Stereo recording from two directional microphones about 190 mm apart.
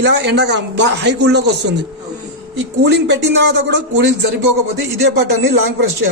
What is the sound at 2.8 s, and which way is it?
Speech, 65° right (ahead or behind).